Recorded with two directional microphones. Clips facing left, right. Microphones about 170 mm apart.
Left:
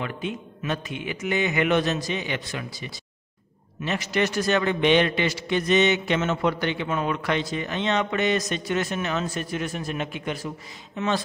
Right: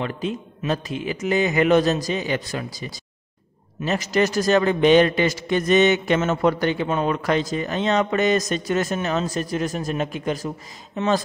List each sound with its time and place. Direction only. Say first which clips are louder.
0.0 s a man's voice: right 4 dB; 35° right (ahead or behind)